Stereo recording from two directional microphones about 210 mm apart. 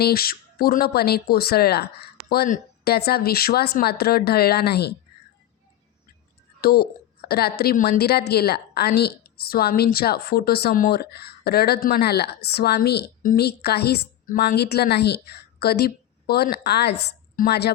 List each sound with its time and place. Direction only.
0.0 s a woman's voice: 45° left (ahead or behind)
6.6 s a woman's voice: 45° left (ahead or behind)